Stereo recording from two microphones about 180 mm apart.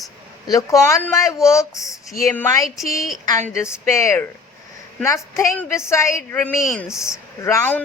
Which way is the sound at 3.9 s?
15° left (ahead or behind).